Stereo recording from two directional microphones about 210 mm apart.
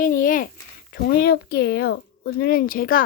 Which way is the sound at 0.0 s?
40° left (ahead or behind).